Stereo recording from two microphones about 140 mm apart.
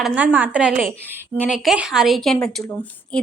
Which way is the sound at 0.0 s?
10° right (ahead or behind).